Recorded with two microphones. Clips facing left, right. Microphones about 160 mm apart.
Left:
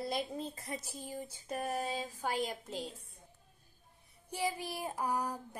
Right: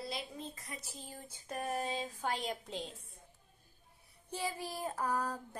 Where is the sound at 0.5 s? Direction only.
30° left (ahead or behind).